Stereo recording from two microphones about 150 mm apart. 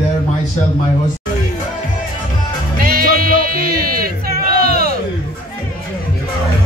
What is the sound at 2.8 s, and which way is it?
Music, 75° right (ahead or behind).